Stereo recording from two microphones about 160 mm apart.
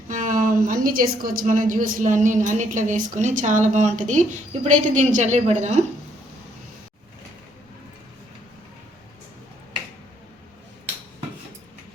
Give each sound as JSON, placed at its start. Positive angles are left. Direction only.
{"t": 0.1, "sound": "a woman's voice", "side_deg": -55}